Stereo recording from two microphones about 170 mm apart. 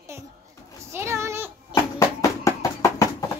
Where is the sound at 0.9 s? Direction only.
15° right (ahead or behind).